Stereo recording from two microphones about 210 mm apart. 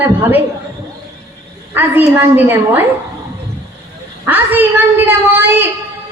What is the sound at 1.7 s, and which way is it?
Speech, 10° right (ahead or behind).